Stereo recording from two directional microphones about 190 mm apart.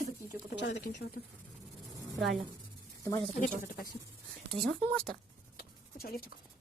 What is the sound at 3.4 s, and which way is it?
Speech, 50° left (ahead or behind).